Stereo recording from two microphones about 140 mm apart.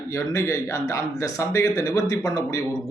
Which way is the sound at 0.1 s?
20° left (ahead or behind).